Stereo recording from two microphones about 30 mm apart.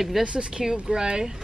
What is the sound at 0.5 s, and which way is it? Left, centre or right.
Speech, right.